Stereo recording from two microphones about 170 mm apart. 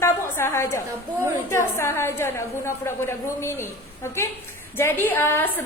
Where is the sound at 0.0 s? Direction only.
15° left (ahead or behind).